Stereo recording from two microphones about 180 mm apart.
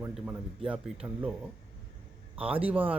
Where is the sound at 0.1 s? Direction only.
5° right (ahead or behind).